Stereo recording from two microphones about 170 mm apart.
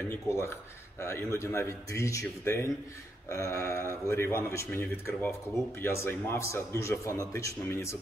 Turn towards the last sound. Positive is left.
turn(degrees=15)  # may be behind; listen again after turning